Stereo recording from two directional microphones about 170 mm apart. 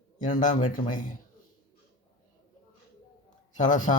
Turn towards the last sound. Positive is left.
turn(degrees=45)  # may be behind; listen again after turning